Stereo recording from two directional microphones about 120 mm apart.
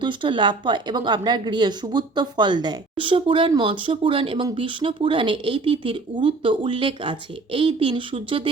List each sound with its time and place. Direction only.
0.0 s a woman's voice: 40° right (ahead or behind)